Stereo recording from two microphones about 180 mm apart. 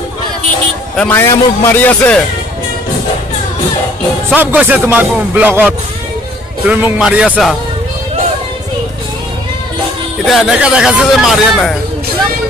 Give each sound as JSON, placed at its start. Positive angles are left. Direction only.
{"t": 0.9, "sound": "a man's voice", "side_deg": 10}
{"t": 4.4, "sound": "speech", "side_deg": -10}
{"t": 10.2, "sound": "speech", "side_deg": -5}